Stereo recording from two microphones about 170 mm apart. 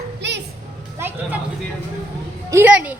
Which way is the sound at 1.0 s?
15° right (ahead or behind).